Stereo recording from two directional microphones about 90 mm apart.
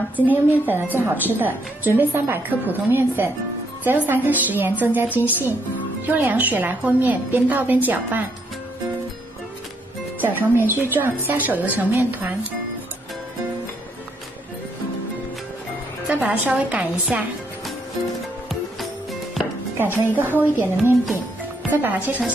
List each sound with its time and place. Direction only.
0.1 s a woman's voice: 20° right (ahead or behind)
10.2 s a woman's voice: 20° right (ahead or behind)
16.1 s a woman's voice: 15° right (ahead or behind)
19.8 s a woman's voice: 20° right (ahead or behind)